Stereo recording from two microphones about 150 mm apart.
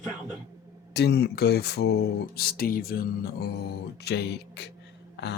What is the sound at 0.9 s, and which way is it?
Speech, 90° left.